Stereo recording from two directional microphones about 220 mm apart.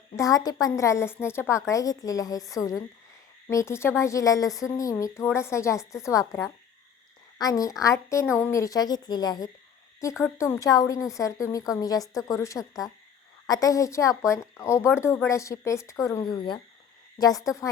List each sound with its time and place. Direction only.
0.2 s a woman's voice: 15° left (ahead or behind)